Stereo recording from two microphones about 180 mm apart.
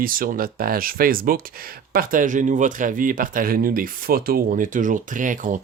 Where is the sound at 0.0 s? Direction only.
50° right (ahead or behind).